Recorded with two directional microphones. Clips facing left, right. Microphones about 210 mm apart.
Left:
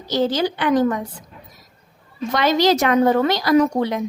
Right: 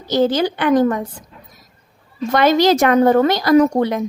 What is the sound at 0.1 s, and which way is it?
Speech, 55° right (ahead or behind).